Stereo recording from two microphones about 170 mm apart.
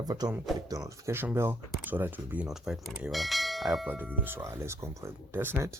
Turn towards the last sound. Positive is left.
turn(degrees=-10)  # may be behind; listen again after turning